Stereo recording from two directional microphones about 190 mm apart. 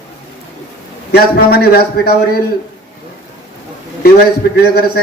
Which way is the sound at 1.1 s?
55° left (ahead or behind).